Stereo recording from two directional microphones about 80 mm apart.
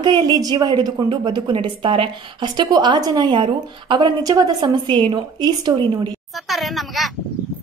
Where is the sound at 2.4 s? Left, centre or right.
Right.